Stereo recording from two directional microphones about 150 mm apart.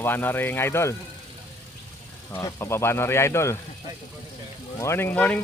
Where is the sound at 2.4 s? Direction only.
20° left (ahead or behind).